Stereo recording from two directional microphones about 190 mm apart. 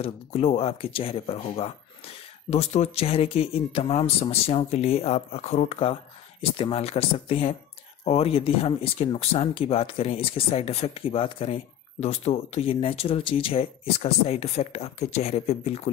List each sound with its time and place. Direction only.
0.0 s speech: 30° left (ahead or behind)